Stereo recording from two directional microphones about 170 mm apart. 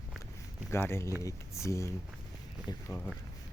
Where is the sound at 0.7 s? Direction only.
15° left (ahead or behind).